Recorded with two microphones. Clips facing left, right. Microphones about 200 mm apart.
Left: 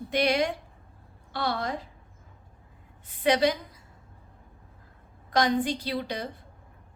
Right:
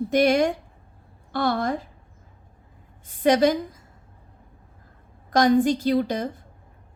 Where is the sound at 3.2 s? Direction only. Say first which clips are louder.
Right 5 dB; 45° right (ahead or behind).